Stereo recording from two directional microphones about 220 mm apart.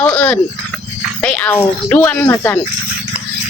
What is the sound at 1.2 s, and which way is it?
Speech, 5° left (ahead or behind).